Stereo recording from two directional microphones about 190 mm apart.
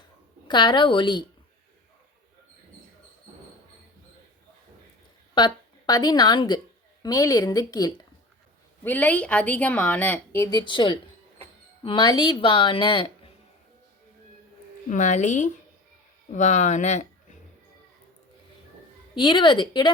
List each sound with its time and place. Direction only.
0.4 s speech: 25° left (ahead or behind)
5.3 s a woman's voice: 25° left (ahead or behind)
8.8 s speech: 10° left (ahead or behind); by 13.1 s 25° left (ahead or behind)
14.8 s speech: 40° left (ahead or behind)
19.1 s speech: 25° left (ahead or behind)